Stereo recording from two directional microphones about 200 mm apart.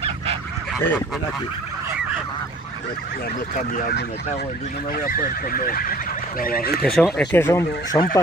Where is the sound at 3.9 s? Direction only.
55° left (ahead or behind).